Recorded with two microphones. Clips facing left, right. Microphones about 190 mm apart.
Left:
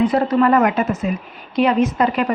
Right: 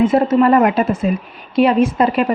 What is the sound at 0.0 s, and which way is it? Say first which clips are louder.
A woman's voice: right 3 dB; 25° right (ahead or behind).